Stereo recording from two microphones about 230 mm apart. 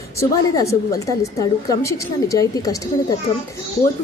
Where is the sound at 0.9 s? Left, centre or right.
Centre.